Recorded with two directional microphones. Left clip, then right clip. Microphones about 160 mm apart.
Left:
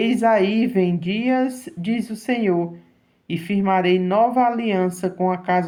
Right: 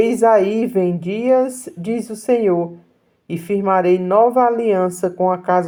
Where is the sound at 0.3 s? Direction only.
45° right (ahead or behind).